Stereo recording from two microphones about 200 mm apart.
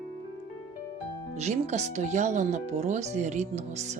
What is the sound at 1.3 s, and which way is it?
Speech, 35° right (ahead or behind).